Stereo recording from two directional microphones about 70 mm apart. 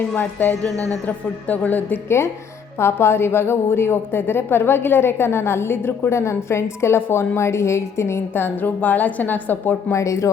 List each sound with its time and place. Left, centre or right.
0.2 s a woman's voice: left
2.0 s a woman's voice: left
9.9 s speech: left